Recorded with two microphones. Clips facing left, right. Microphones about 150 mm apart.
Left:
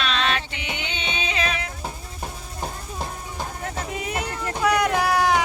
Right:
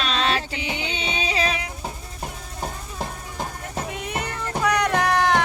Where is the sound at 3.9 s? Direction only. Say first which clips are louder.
Left 1 dB; 5° left (ahead or behind).